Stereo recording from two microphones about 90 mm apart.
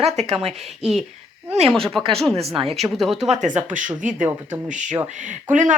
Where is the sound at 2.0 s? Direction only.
5° left (ahead or behind).